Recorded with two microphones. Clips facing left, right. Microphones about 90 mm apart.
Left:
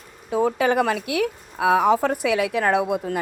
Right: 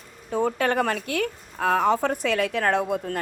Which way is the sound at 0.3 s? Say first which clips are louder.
Left 3 dB; 5° left (ahead or behind).